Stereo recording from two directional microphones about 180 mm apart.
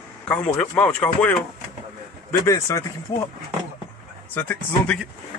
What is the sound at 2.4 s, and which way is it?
Speech, 20° left (ahead or behind).